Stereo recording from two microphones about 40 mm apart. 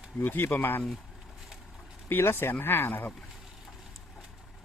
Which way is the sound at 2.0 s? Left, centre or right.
Left.